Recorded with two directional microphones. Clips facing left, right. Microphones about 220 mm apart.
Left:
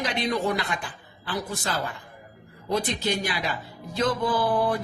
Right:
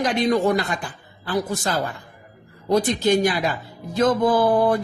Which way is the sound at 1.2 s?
40° right (ahead or behind).